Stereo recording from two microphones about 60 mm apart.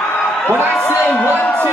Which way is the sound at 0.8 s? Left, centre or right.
Left.